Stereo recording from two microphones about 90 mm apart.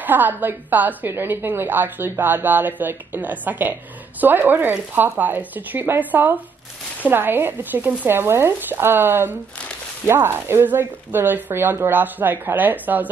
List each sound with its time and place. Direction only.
0.0 s a woman's voice: 20° right (ahead or behind)